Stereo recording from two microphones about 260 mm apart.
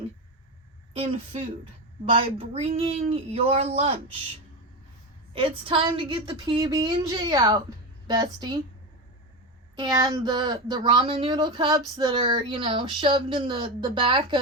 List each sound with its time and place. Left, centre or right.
0.9 s speech: right
5.3 s a woman's voice: right
9.7 s a woman's voice: centre